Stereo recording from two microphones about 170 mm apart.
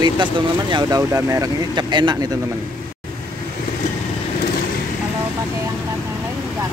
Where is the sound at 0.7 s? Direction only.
20° right (ahead or behind).